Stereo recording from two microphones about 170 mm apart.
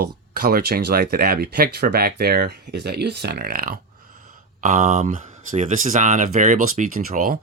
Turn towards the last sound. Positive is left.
turn(degrees=-55)  # may be behind; listen again after turning